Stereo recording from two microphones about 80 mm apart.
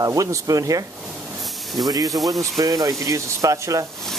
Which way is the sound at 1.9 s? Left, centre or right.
Right.